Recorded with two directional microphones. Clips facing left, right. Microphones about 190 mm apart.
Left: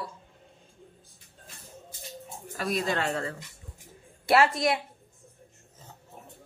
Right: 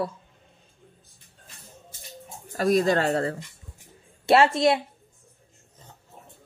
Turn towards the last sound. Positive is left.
turn(degrees=-25)  # may be behind; listen again after turning